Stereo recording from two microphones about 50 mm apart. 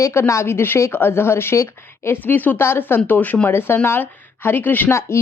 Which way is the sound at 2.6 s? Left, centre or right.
Left.